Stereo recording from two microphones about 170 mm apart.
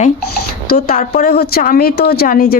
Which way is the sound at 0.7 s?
60° left (ahead or behind).